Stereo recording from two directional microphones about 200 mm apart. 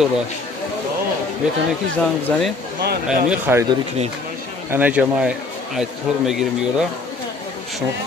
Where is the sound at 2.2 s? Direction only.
5° left (ahead or behind).